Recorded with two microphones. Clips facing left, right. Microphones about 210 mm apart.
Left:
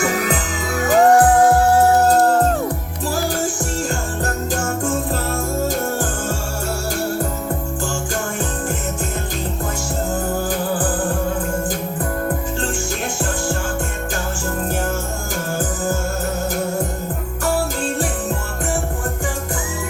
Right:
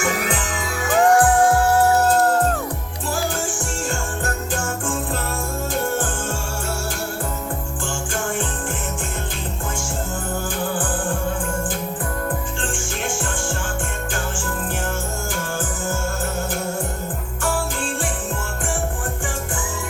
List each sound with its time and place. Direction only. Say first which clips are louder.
0.9 s music: left 3 dB; 40° left (ahead or behind)
4.2 s music: left 3 dB; 40° left (ahead or behind)